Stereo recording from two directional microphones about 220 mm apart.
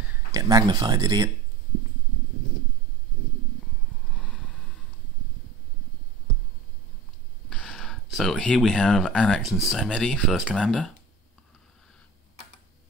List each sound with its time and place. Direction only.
0.0 s speech: 10° right (ahead or behind)
4.2 s a sound: centre (ahead or behind)
7.4 s speech: 5° left (ahead or behind)